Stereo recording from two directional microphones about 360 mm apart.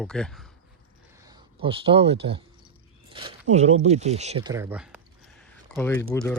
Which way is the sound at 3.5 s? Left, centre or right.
Centre.